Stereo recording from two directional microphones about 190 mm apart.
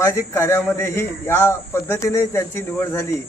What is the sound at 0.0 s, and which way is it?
A man's voice, 15° left (ahead or behind).